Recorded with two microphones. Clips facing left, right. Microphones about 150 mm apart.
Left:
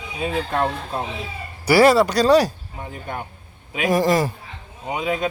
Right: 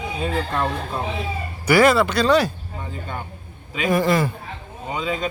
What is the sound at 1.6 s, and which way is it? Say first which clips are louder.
Speech: left 2 dB; 35° left (ahead or behind).